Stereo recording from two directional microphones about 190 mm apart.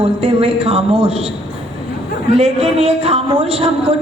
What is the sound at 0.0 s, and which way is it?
A woman's voice, 30° right (ahead or behind).